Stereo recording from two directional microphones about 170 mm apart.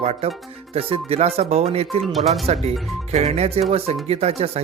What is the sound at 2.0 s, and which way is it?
Speech, centre (ahead or behind).